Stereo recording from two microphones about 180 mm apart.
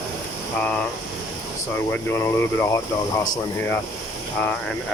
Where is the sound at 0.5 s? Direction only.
10° left (ahead or behind).